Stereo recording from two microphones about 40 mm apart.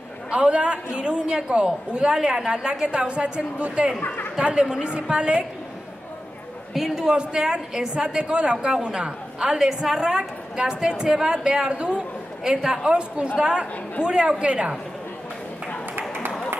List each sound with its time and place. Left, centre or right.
0.3 s a woman's voice: right
6.7 s a man's voice: centre
7.1 s a woman's voice: centre
9.6 s a woman's voice: centre; by 14.7 s right